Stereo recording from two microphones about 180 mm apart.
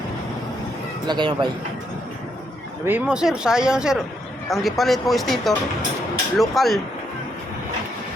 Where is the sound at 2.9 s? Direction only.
10° right (ahead or behind).